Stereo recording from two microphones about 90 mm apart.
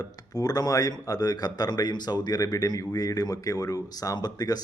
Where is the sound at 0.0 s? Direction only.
45° left (ahead or behind).